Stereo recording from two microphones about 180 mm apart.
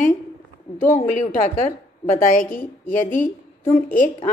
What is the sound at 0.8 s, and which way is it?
A woman's voice, 45° left (ahead or behind).